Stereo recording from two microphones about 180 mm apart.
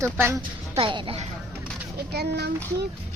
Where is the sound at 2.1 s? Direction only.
65° right (ahead or behind).